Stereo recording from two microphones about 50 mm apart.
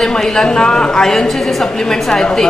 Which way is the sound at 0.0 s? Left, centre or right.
Centre.